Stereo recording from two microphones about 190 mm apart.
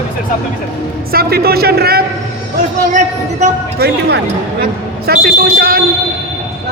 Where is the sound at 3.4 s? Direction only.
40° right (ahead or behind).